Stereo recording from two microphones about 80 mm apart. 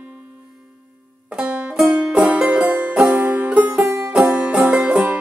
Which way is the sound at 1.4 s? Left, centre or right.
Centre.